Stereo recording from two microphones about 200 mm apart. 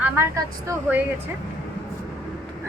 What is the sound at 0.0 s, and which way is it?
Speech, 10° right (ahead or behind).